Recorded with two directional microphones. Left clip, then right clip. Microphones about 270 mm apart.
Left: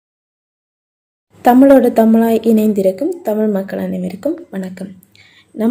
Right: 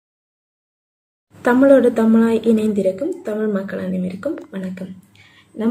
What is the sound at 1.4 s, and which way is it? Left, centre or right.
A woman's voice, left.